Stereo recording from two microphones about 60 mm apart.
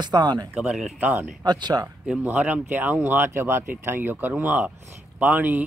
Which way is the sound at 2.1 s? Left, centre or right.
Right.